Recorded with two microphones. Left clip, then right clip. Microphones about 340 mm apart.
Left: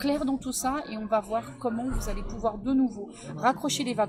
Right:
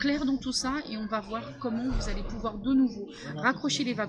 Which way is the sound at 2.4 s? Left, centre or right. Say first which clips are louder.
Left 1 dB; centre.